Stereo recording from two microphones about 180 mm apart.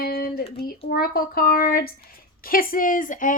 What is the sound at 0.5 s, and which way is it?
A child's voice, 50° left (ahead or behind).